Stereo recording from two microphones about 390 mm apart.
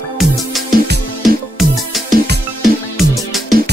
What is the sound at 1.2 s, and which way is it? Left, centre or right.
Music, centre.